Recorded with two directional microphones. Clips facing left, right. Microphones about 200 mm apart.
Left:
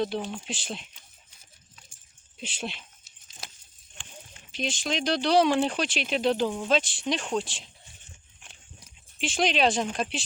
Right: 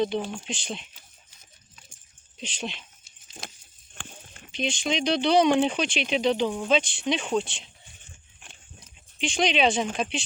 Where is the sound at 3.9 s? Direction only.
60° right (ahead or behind).